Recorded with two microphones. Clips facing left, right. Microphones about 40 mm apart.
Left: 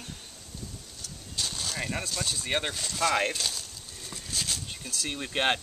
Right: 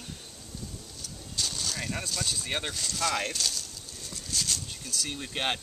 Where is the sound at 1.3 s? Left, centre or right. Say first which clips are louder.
Even; centre.